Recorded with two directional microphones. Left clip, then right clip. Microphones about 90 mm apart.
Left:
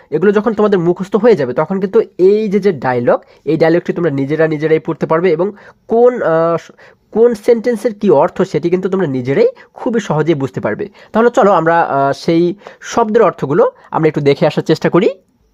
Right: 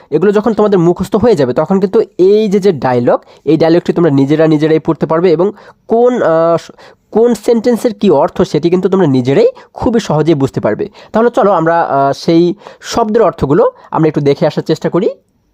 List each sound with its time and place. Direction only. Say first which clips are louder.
0.1 s speech: right 2 dB; 40° right (ahead or behind)
3.8 s speech: right 5 dB; 50° right (ahead or behind)
4.1 s speech: right 4 dB; 40° right (ahead or behind)
4.9 s speech: right 3 dB; 30° right (ahead or behind)
11.3 s speech: even; 15° right (ahead or behind)
12.8 s speech: right 1 dB; 40° right (ahead or behind)
13.9 s speech: right 1 dB; 25° right (ahead or behind)
14.6 s speech: left 1 dB; centre (ahead or behind)